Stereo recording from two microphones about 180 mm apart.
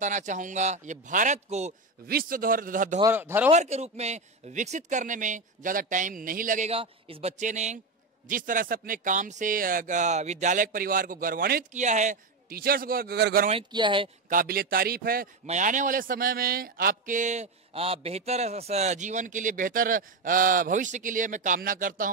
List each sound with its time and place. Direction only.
0.0 s speech: 45° right (ahead or behind)
2.0 s speech: 55° right (ahead or behind)
3.0 s speech: 15° right (ahead or behind)
3.4 s speech: 40° right (ahead or behind)
6.7 s speech: 30° right (ahead or behind); by 11.8 s 55° right (ahead or behind)
11.8 s a man's voice: 40° right (ahead or behind); by 13.5 s 60° right (ahead or behind)
13.5 s speech: 25° right (ahead or behind)
14.3 s a man's voice: 55° right (ahead or behind)
15.4 s speech: 45° right (ahead or behind)